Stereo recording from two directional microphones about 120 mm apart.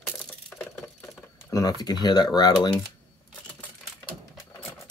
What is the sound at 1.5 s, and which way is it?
Speech, 30° left (ahead or behind).